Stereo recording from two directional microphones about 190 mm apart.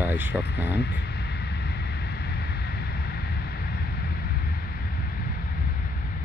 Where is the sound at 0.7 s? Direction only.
60° left (ahead or behind).